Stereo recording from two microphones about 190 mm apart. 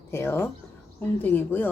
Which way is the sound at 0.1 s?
15° left (ahead or behind).